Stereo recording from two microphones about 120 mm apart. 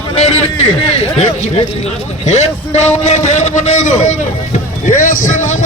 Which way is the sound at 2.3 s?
70° left (ahead or behind).